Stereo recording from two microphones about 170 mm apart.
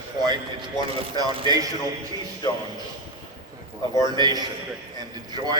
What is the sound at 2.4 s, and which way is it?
Speech, 25° left (ahead or behind).